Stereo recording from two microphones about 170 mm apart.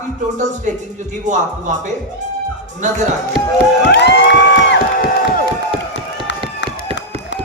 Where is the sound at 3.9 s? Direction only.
90° left; by 5.4 s 60° left (ahead or behind).